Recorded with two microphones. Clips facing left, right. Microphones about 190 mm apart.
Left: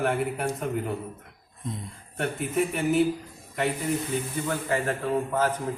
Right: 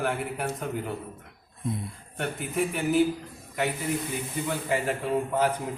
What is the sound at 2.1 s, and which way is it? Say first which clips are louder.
Speech: left 3 dB; centre (ahead or behind).